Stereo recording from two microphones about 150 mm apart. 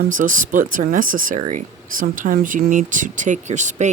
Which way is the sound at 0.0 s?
60° right (ahead or behind).